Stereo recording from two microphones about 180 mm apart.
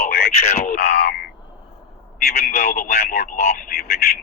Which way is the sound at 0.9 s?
60° left (ahead or behind).